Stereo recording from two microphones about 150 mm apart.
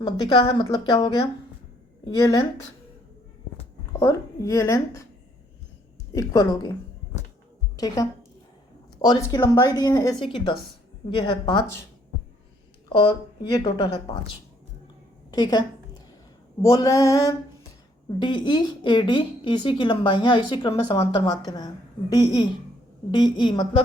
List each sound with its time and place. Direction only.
0.0 s a woman's voice: 30° left (ahead or behind)
4.0 s a woman's voice: 20° left (ahead or behind)
6.1 s a woman's voice: 20° left (ahead or behind)
9.0 s a woman's voice: 30° left (ahead or behind)
12.9 s a woman's voice: 30° left (ahead or behind)
15.3 s a woman's voice: 25° left (ahead or behind)